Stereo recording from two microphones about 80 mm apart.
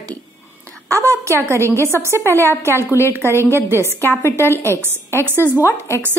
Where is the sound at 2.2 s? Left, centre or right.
Left.